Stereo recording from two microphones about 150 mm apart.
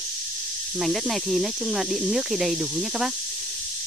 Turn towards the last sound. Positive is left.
turn(degrees=0)  # may be behind; listen again after turning